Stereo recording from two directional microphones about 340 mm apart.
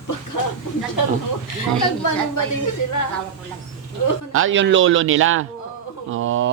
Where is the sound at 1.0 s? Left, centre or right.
Left.